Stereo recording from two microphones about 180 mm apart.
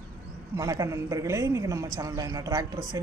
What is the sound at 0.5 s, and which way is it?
A woman's voice, 20° right (ahead or behind).